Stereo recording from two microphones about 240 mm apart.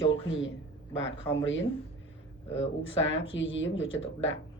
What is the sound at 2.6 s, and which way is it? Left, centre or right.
Speech, left.